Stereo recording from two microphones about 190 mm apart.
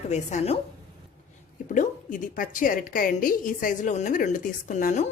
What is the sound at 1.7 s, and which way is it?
A woman's voice, 45° left (ahead or behind).